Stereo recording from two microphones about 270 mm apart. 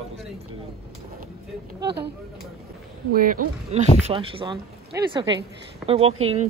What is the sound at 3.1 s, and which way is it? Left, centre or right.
Speech, right.